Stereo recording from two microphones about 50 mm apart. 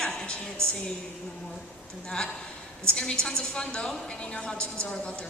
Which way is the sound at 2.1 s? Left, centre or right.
Centre.